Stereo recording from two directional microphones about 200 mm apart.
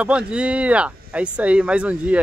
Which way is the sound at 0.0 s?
5° right (ahead or behind).